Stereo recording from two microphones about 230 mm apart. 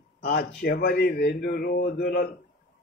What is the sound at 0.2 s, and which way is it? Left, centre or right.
A man's voice, left.